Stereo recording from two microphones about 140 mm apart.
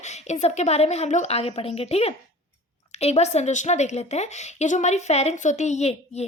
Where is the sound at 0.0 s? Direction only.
55° left (ahead or behind).